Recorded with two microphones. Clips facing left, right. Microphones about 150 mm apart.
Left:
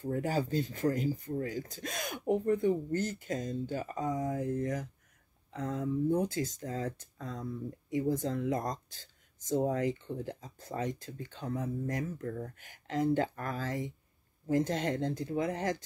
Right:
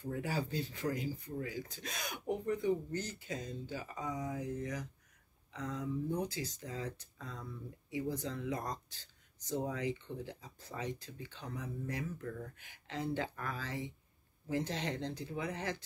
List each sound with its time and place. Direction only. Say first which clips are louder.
0.0 s speech: left 6 dB; 45° left (ahead or behind)